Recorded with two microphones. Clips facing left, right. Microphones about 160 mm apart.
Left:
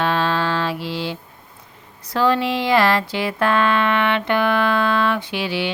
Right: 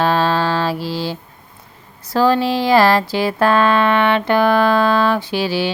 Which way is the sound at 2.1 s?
35° right (ahead or behind).